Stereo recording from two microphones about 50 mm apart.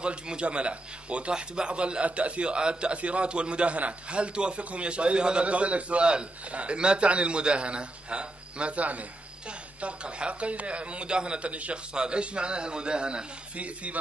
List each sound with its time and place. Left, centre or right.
0.0 s a man's voice: right